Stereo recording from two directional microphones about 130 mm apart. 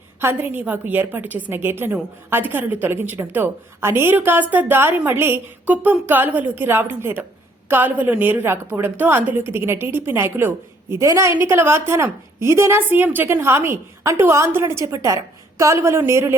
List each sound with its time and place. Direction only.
0.2 s a woman's voice: 15° right (ahead or behind)